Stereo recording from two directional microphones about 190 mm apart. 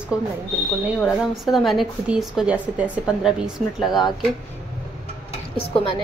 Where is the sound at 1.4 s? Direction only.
Centre (ahead or behind).